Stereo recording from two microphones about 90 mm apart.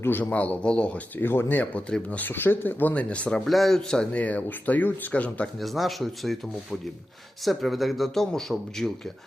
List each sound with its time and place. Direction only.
0.0 s speech: 20° left (ahead or behind)
5.5 s a man's voice: centre (ahead or behind)